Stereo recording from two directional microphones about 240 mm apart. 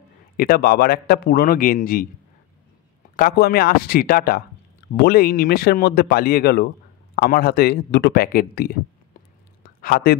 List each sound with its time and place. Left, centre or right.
0.4 s speech: left
3.2 s speech: left
9.6 s a sound: left